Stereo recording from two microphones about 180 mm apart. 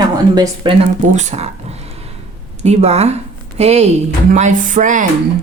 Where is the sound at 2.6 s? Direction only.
35° right (ahead or behind).